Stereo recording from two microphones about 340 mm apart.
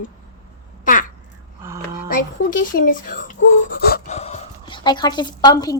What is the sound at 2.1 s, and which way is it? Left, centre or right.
Speech, left.